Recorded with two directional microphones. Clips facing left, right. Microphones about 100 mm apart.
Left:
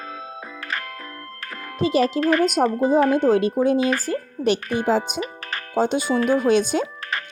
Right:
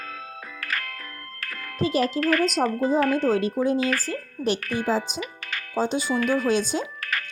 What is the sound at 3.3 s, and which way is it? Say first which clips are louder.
Speech: left 4 dB; 65° left (ahead or behind).